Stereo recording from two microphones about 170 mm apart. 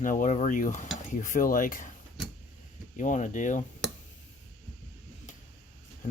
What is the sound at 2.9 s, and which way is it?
Speech, 50° left (ahead or behind).